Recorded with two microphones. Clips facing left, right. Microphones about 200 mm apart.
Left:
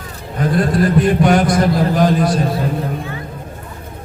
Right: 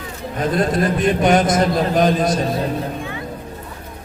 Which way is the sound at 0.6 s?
20° right (ahead or behind).